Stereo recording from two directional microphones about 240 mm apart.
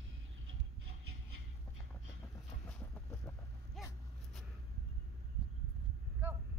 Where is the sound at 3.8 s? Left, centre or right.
Centre.